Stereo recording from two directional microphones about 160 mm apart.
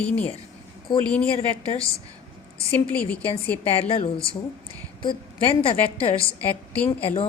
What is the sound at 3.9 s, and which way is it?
A woman's voice, 35° left (ahead or behind).